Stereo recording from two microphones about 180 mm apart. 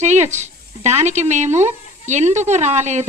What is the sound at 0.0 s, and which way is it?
Speech, 40° right (ahead or behind).